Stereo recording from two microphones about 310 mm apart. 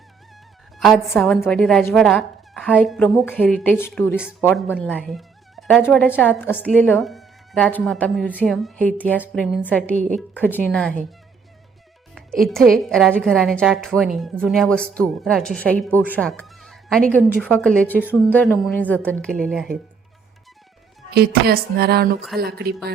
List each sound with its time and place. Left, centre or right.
0.8 s speech: centre
12.7 s speech: centre
21.1 s music: right